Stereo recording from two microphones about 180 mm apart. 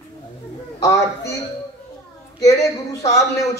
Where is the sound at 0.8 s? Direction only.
20° left (ahead or behind).